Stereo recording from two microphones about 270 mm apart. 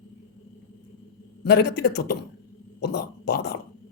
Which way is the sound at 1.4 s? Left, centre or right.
Left.